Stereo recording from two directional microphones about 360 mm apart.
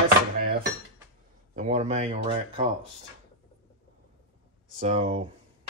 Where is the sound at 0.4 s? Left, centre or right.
Right.